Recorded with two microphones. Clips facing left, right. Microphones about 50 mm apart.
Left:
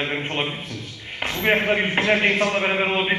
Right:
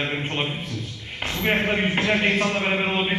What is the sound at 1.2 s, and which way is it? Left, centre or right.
A man's voice, left.